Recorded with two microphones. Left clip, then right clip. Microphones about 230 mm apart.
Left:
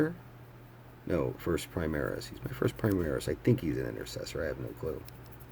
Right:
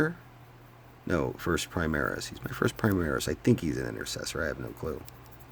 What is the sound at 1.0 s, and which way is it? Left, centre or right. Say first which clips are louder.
Speech: right 2 dB; right.